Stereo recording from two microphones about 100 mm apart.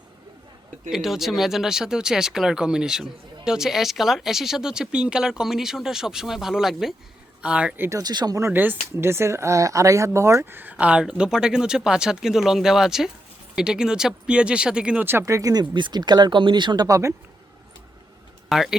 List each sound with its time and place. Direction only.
0.9 s speech: 5° right (ahead or behind)
7.8 s speech: 30° right (ahead or behind)
8.0 s speech: 45° right (ahead or behind)
8.4 s speech: 25° right (ahead or behind)
15.2 s speech: 35° right (ahead or behind)
15.7 s speech: 45° right (ahead or behind); by 17.2 s 30° right (ahead or behind)
18.4 s speech: 5° right (ahead or behind)